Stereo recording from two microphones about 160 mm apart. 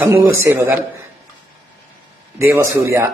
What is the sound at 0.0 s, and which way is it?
Speech, 15° right (ahead or behind).